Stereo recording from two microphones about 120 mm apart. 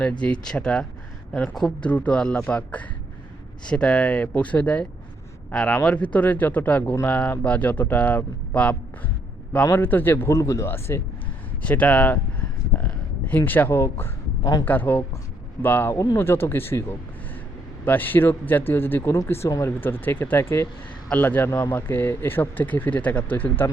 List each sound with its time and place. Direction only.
0.0 s a man's voice: 10° left (ahead or behind)
12.8 s a sound: 10° left (ahead or behind)
14.6 s a man's voice: 15° left (ahead or behind)
17.8 s a man's voice: 15° left (ahead or behind)